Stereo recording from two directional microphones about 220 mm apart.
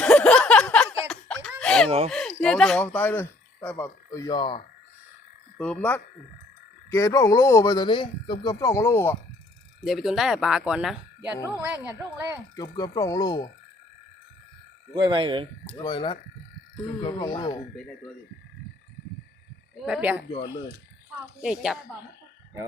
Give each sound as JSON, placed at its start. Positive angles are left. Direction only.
{"t": 0.0, "sound": "a sound", "side_deg": 5}
{"t": 1.0, "sound": "laughter", "side_deg": 5}
{"t": 2.0, "sound": "speech", "side_deg": 0}
{"t": 5.5, "sound": "speech", "side_deg": 5}
{"t": 9.8, "sound": "a woman's voice", "side_deg": 0}
{"t": 12.5, "sound": "speech", "side_deg": 15}
{"t": 14.9, "sound": "speech", "side_deg": -20}
{"t": 15.8, "sound": "speech", "side_deg": 20}
{"t": 19.7, "sound": "speech", "side_deg": -5}
{"t": 20.3, "sound": "speech", "side_deg": 20}
{"t": 21.4, "sound": "speech", "side_deg": -5}